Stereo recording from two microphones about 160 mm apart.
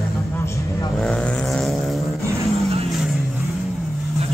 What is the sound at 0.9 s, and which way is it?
Vehicle, centre (ahead or behind).